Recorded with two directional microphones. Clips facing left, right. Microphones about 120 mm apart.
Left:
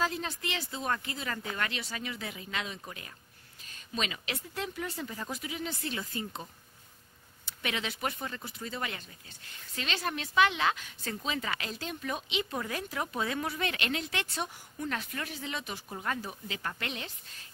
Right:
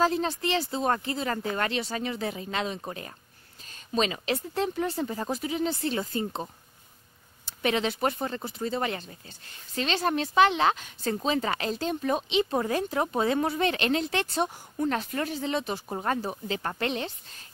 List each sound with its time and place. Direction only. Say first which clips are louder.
0.0 s speech: right 8 dB; 30° right (ahead or behind)